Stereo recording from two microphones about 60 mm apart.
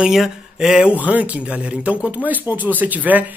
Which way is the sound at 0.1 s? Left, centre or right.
Centre.